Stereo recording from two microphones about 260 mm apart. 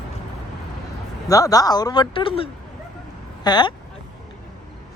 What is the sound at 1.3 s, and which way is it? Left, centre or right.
Speech, centre.